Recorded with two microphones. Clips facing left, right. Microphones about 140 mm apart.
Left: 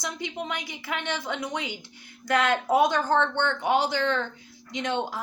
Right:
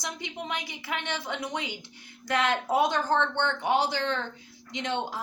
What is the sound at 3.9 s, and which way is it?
Speech, 65° left (ahead or behind).